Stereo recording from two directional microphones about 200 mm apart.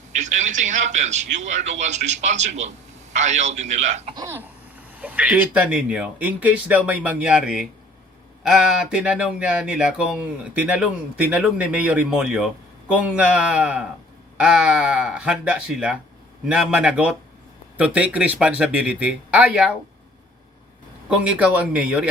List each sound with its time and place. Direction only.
0.2 s speech: 35° right (ahead or behind)
4.1 s speech: 15° right (ahead or behind)
21.1 s speech: 5° right (ahead or behind)